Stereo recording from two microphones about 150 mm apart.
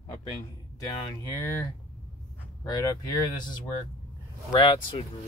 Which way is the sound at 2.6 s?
25° left (ahead or behind).